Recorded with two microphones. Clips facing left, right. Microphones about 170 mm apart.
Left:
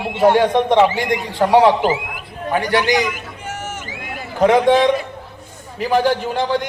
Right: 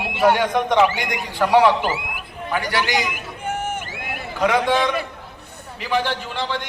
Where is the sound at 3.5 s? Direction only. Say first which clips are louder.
Right 4 dB; 55° right (ahead or behind).